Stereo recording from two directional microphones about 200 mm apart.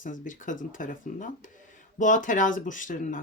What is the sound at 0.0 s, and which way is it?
Speech, 40° left (ahead or behind).